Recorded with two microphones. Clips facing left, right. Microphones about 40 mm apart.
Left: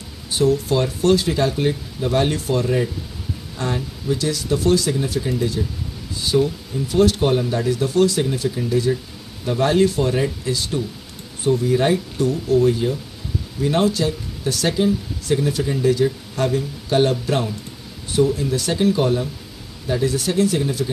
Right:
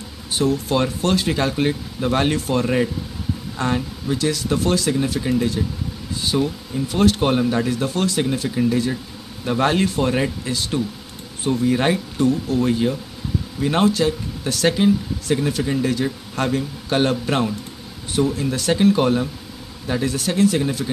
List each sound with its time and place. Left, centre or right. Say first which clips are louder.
0.3 s speech: left 2 dB; right
6.3 s speech: left 3 dB; centre
6.9 s speech: left 1 dB; right